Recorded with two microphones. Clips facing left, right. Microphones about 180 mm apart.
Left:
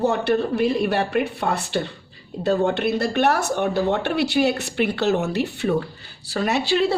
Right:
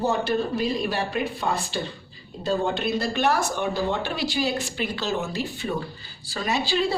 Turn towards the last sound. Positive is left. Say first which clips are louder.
# left 4 dB
turn(degrees=65)  # may be behind; listen again after turning